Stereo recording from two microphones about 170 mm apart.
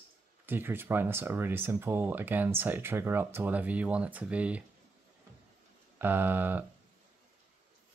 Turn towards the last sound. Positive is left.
turn(degrees=-10)  # may be behind; listen again after turning